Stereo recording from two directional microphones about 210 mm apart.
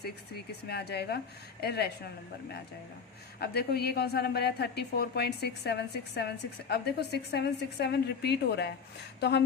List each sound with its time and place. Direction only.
0.7 s a woman's voice: 50° left (ahead or behind)
3.4 s a woman's voice: 50° left (ahead or behind)